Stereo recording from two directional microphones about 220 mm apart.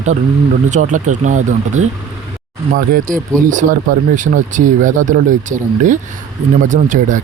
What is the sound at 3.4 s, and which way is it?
Speech, 35° right (ahead or behind).